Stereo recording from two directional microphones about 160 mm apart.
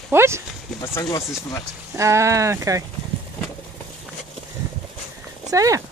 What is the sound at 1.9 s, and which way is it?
Speech, 20° right (ahead or behind).